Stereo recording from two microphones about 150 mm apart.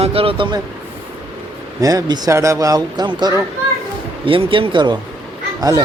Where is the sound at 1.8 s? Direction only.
25° right (ahead or behind).